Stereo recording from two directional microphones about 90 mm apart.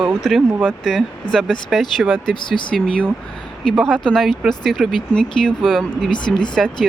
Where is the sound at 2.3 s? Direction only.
60° left (ahead or behind).